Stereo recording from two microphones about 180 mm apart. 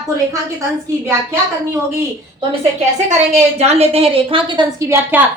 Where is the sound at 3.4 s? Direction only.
35° right (ahead or behind).